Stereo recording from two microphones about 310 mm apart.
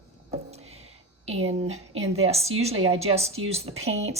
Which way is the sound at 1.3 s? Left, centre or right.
Centre.